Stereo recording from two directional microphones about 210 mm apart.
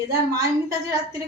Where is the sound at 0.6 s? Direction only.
15° right (ahead or behind).